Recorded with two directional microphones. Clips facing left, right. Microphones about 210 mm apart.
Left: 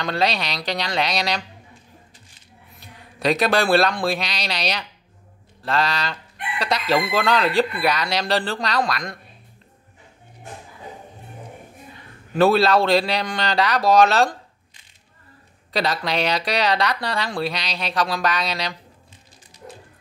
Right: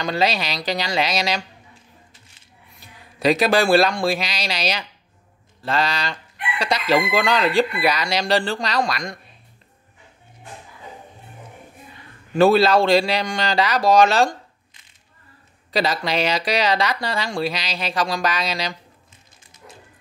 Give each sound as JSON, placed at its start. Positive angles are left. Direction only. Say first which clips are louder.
{"t": 0.0, "sound": "speech", "louder": "right 1 dB", "side_deg": 0}
{"t": 2.8, "sound": "a man's voice", "louder": "right 3 dB", "side_deg": 0}
{"t": 12.4, "sound": "speech", "louder": "right 2 dB", "side_deg": 0}
{"t": 15.7, "sound": "speech", "louder": "right 1 dB", "side_deg": 0}
{"t": 19.6, "sound": "a sound", "louder": "left 5 dB", "side_deg": 40}